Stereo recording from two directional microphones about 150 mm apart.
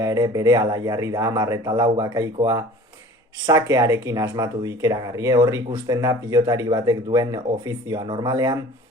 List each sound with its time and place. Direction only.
0.0 s speech: 25° right (ahead or behind)